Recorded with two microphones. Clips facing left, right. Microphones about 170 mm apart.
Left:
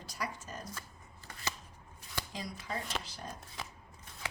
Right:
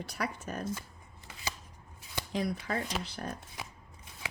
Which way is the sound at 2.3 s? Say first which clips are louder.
Right 10 dB; 60° right (ahead or behind).